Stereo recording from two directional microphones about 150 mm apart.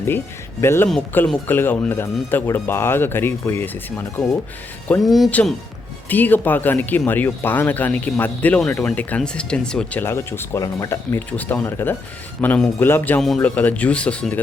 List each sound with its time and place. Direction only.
0.6 s speech: 15° left (ahead or behind)
5.0 s speech: centre (ahead or behind)